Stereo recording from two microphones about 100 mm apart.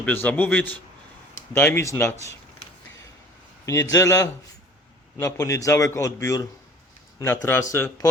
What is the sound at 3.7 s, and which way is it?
Speech, 30° left (ahead or behind).